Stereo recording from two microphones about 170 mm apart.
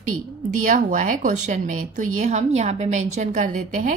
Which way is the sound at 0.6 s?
50° right (ahead or behind).